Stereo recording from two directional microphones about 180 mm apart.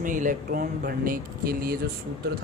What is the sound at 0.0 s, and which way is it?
Speech, 45° right (ahead or behind).